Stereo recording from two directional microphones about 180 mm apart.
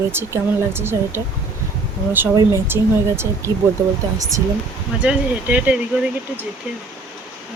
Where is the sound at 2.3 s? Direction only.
15° right (ahead or behind).